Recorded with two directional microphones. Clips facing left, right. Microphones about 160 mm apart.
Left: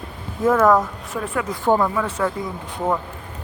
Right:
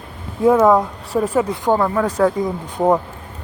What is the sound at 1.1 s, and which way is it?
Speech, 30° right (ahead or behind).